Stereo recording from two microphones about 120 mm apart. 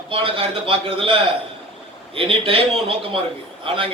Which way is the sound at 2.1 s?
50° right (ahead or behind).